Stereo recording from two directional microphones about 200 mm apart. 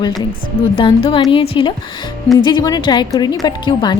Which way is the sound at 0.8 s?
25° left (ahead or behind).